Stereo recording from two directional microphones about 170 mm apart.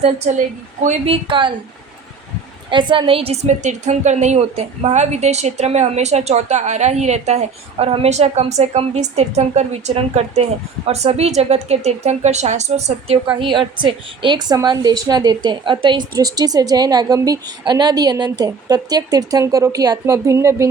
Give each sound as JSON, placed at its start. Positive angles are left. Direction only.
{"t": 0.8, "sound": "a woman's voice", "side_deg": -40}
{"t": 2.6, "sound": "a woman's voice", "side_deg": -30}
{"t": 13.3, "sound": "a woman's voice", "side_deg": -30}